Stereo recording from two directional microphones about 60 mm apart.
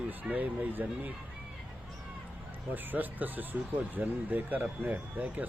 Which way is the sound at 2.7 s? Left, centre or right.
Right.